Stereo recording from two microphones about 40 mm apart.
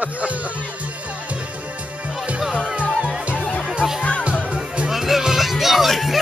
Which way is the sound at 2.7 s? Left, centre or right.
Right.